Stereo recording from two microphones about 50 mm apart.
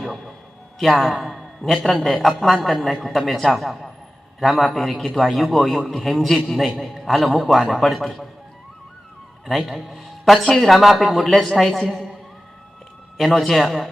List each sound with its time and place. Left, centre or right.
0.8 s a man's voice: centre
9.5 s a man's voice: centre
13.1 s a man's voice: centre